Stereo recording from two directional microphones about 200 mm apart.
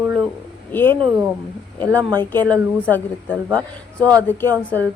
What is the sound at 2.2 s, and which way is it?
Speech, 10° left (ahead or behind).